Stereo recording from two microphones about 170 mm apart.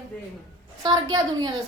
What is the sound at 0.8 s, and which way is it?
Speech, 25° right (ahead or behind).